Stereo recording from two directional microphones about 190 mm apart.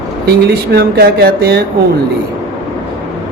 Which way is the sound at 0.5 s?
55° right (ahead or behind).